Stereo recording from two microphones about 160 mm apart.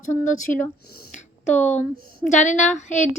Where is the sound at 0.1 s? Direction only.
55° left (ahead or behind).